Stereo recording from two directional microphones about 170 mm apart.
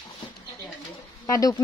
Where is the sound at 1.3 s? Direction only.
20° left (ahead or behind).